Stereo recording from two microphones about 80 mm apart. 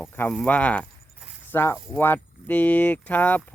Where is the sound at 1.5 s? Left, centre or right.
Left.